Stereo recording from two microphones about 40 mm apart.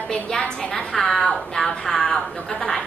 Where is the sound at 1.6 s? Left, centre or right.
Left.